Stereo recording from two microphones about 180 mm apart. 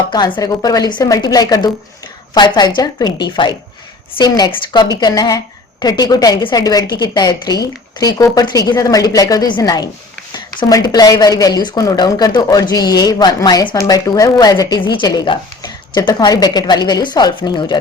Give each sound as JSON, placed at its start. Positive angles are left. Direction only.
{"t": 0.3, "sound": "a woman's voice", "side_deg": 20}